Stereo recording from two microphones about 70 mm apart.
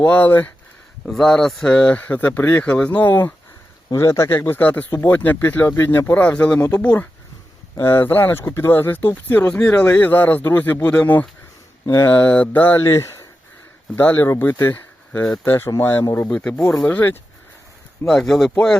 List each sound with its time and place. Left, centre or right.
0.0 s speech: left
1.0 s speech: centre
1.7 s speech: centre
3.9 s speech: left
4.3 s speech: left
4.9 s speech: left
5.6 s speech: left
7.8 s speech: left
12.8 s speech: left
13.9 s speech: left
16.3 s speech: centre
18.0 s speech: centre